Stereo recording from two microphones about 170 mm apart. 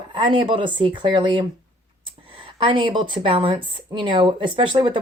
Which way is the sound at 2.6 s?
30° right (ahead or behind).